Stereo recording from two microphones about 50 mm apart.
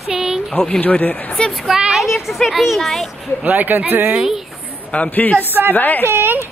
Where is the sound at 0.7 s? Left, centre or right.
Left.